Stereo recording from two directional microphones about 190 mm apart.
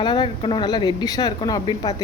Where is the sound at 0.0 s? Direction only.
25° left (ahead or behind).